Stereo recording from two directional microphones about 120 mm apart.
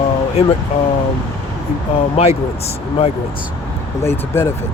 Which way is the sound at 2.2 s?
55° left (ahead or behind).